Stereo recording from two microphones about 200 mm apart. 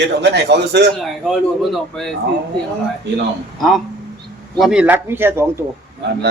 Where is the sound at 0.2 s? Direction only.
60° right (ahead or behind).